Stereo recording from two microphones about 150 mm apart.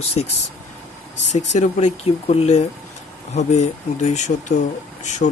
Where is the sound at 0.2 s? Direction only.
40° left (ahead or behind).